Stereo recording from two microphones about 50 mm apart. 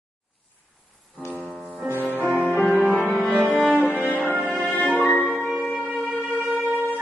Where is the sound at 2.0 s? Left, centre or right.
Right.